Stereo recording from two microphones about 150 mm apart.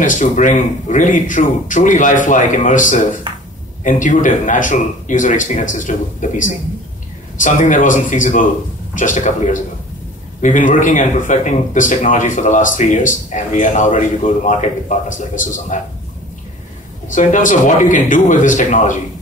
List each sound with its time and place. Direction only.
0.0 s speech: 60° left (ahead or behind)
17.1 s speech: 55° left (ahead or behind)